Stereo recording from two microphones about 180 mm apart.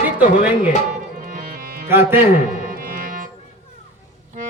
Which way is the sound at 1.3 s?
50° right (ahead or behind).